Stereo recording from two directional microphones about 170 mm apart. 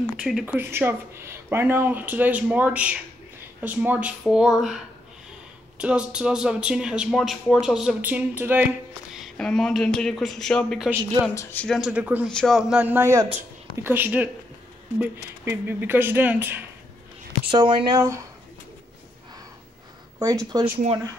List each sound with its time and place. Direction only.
0.2 s speech: 5° right (ahead or behind)
9.1 s speech: centre (ahead or behind)
12.3 s speech: 5° left (ahead or behind)
17.5 s speech: 30° right (ahead or behind)
20.2 s speech: 20° right (ahead or behind)